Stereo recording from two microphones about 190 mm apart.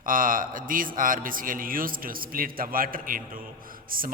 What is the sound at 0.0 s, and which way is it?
A man's voice, 45° right (ahead or behind).